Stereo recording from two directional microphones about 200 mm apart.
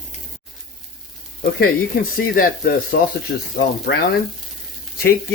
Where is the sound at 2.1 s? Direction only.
45° left (ahead or behind).